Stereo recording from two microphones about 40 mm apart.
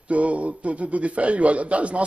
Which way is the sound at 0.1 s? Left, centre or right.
Right.